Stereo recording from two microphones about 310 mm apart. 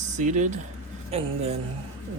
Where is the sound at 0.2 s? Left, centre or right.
Right.